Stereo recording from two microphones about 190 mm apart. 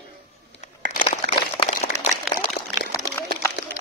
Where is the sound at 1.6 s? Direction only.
35° left (ahead or behind).